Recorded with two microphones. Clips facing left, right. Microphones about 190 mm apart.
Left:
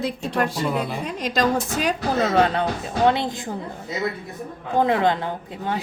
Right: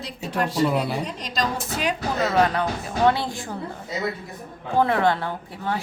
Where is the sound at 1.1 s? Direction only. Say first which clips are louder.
Left 6 dB; 55° left (ahead or behind).